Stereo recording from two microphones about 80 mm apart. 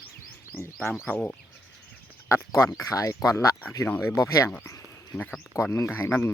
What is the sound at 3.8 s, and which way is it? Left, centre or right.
Speech, left.